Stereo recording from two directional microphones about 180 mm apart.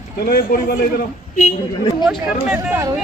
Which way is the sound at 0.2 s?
55° left (ahead or behind).